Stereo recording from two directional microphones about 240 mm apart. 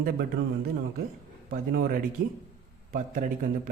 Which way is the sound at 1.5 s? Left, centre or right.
Right.